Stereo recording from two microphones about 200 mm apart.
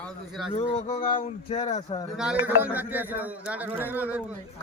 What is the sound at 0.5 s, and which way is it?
Speech, 35° left (ahead or behind).